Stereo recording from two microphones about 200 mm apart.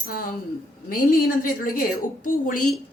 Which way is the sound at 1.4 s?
45° left (ahead or behind).